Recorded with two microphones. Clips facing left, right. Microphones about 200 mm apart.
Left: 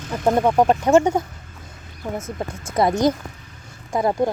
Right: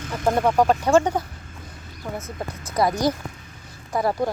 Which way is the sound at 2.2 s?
45° left (ahead or behind).